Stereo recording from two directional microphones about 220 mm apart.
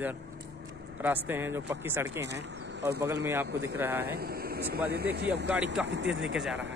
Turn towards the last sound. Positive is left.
turn(degrees=-60)  # may be behind; listen again after turning